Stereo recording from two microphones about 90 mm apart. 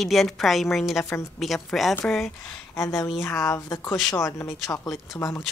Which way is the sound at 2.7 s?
30° left (ahead or behind).